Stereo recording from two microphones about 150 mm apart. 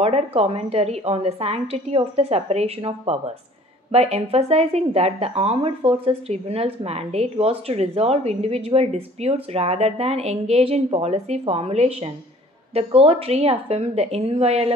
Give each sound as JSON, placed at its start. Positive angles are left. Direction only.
{"t": 0.0, "sound": "speech", "side_deg": -40}